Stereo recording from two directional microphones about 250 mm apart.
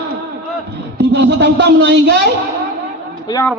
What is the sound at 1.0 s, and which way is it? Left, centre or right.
A man's voice, right.